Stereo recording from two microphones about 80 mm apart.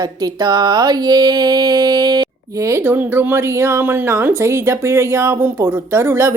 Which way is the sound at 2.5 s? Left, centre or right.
Right.